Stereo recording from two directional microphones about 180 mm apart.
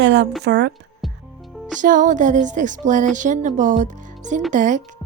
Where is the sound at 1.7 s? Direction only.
45° right (ahead or behind).